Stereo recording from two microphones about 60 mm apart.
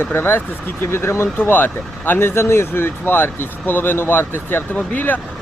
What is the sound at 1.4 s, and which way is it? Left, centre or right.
Speech, left.